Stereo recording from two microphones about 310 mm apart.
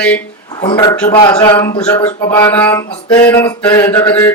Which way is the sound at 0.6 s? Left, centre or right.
Centre.